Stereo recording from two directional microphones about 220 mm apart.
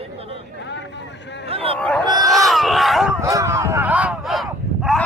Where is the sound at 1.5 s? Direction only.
25° right (ahead or behind).